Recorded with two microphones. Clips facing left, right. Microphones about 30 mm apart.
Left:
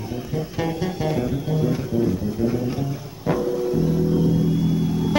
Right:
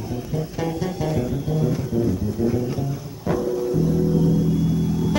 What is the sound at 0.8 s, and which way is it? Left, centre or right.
Music, centre.